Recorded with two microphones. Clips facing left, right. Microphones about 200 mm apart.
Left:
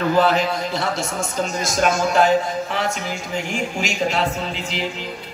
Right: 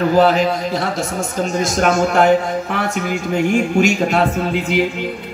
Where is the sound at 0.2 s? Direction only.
45° right (ahead or behind).